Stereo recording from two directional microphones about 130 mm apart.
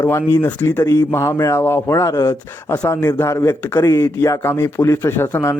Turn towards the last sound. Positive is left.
turn(degrees=20)  # may be behind; listen again after turning